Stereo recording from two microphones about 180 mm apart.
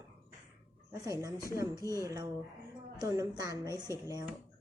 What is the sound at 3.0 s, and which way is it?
Speech, 20° right (ahead or behind).